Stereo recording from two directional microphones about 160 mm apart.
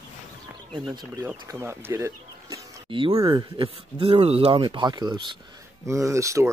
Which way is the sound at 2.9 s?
35° right (ahead or behind).